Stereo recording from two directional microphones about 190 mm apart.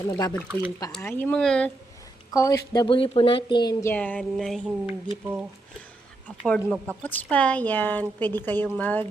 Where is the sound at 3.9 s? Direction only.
10° left (ahead or behind).